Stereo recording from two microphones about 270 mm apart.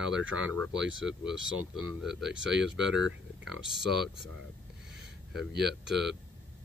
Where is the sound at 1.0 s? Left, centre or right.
Centre.